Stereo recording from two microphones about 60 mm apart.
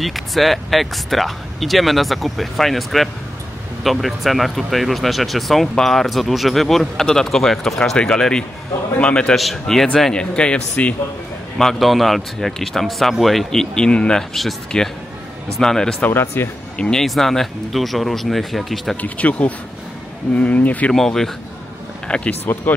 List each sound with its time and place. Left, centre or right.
0.0 s speech: centre
11.5 s speech: centre
16.1 s speech: left
16.7 s speech: centre
17.0 s speech: centre
18.9 s speech: left
20.9 s speech: centre
22.0 s speech: centre